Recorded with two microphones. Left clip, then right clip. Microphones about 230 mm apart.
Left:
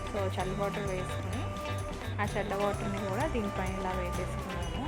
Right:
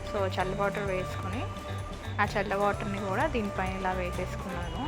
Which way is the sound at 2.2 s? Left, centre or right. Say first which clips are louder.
Right 5 dB; centre.